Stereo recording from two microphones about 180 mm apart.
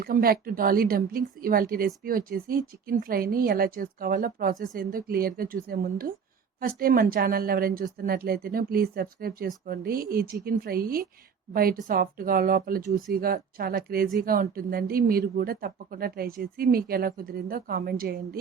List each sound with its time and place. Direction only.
0.0 s a woman's voice: 55° right (ahead or behind)